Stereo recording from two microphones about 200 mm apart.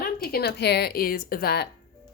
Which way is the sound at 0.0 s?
50° left (ahead or behind).